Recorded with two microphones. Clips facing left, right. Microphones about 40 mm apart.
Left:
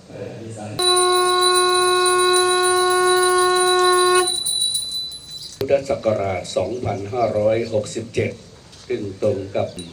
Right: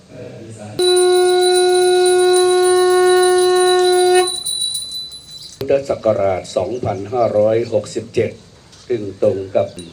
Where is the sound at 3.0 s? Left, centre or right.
Right.